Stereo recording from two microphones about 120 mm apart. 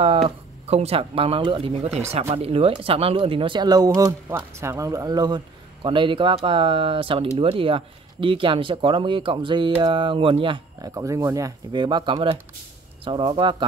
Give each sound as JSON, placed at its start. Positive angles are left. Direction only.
{"t": 0.7, "sound": "speech", "side_deg": -60}
{"t": 10.8, "sound": "speech", "side_deg": -30}
{"t": 11.7, "sound": "speech", "side_deg": -40}